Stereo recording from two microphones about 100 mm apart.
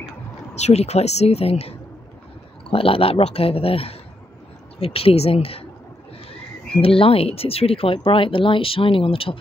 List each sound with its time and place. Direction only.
0.6 s speech: 90° left
2.7 s speech: 65° left (ahead or behind)
4.7 s speech: 80° left
6.8 s speech: 70° left (ahead or behind)